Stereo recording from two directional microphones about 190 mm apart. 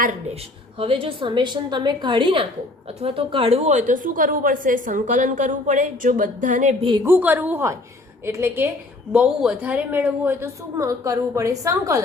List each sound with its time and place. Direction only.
0.8 s a woman's voice: 30° right (ahead or behind)
7.0 s a woman's voice: 10° right (ahead or behind)